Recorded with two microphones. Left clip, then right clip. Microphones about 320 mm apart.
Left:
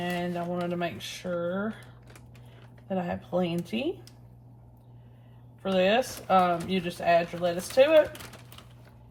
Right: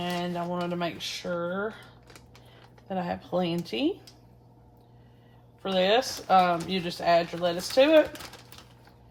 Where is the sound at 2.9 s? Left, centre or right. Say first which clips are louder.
Even; right.